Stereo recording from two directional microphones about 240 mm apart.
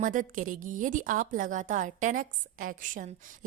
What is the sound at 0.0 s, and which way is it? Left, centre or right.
A woman's voice, right.